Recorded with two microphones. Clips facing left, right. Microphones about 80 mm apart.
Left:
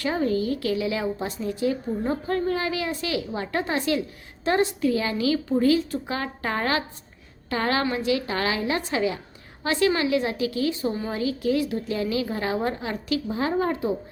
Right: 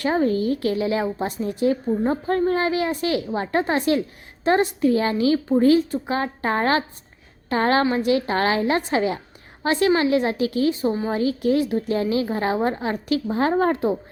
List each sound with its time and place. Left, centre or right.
0.0 s a woman's voice: right
10.9 s speech: right
11.2 s a woman's voice: right